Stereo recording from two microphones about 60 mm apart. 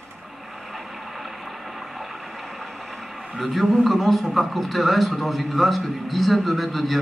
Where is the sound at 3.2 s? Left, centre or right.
Centre.